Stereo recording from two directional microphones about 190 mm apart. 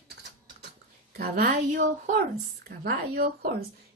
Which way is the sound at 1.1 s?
50° right (ahead or behind).